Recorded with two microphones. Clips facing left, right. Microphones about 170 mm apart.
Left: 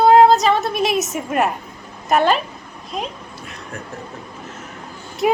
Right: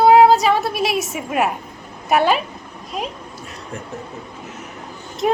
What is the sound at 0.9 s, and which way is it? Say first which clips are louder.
Speech: left 2 dB; 45° left (ahead or behind).